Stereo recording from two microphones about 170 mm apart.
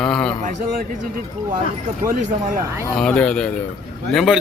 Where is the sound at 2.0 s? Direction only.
50° right (ahead or behind).